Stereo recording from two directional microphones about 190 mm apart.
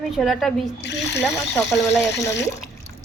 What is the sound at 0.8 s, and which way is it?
Speech, 65° left (ahead or behind).